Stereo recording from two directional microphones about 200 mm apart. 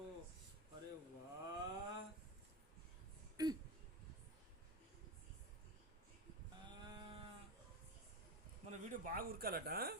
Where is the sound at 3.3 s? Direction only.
20° right (ahead or behind).